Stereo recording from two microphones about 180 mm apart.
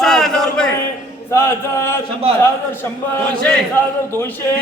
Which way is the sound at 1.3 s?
15° left (ahead or behind).